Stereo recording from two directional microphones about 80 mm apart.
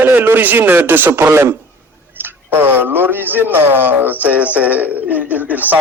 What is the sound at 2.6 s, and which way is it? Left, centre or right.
A man's voice, right.